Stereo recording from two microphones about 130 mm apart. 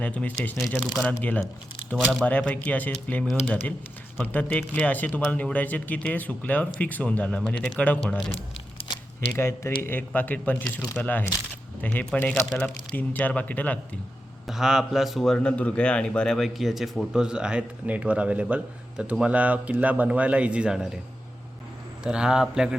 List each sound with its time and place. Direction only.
0.0 s a man's voice: 10° left (ahead or behind)
9.4 s speech: 20° left (ahead or behind)
14.4 s a man's voice: 5° right (ahead or behind)
22.0 s a man's voice: 5° right (ahead or behind)